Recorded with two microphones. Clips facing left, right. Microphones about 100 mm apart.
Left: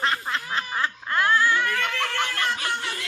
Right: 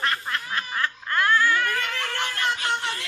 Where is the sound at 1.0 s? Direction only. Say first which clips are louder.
Even; 10° left (ahead or behind).